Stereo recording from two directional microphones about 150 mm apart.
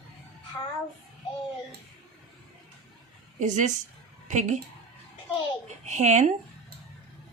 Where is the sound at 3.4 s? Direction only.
55° right (ahead or behind).